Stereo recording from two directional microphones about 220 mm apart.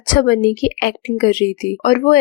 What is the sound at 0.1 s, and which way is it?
Speech, 40° left (ahead or behind).